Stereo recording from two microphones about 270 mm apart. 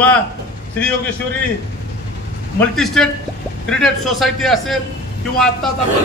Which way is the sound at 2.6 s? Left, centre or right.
Centre.